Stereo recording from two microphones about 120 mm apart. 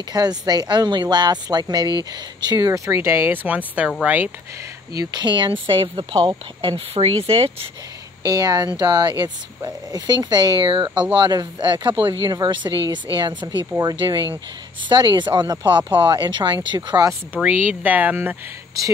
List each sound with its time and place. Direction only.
0.1 s speech: 35° right (ahead or behind); by 4.3 s 15° right (ahead or behind)
4.9 s speech: 35° right (ahead or behind); by 7.5 s 55° right (ahead or behind)
8.3 s speech: 30° right (ahead or behind)
17.3 s speech: 15° right (ahead or behind)